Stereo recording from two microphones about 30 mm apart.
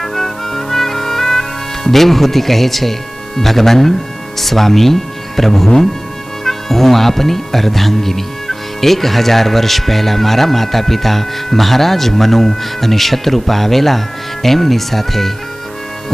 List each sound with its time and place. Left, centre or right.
0.0 s music: centre
3.3 s speech: centre